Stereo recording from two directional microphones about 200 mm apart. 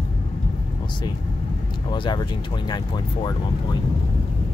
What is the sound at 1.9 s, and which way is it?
Speech, 20° left (ahead or behind).